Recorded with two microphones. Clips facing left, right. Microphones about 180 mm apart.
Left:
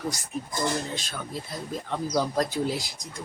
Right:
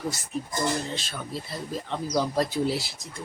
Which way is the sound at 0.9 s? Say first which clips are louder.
Right 1 dB; centre (ahead or behind).